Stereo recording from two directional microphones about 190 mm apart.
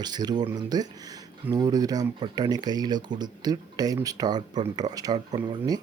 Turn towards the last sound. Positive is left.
turn(degrees=-20)  # may be behind; listen again after turning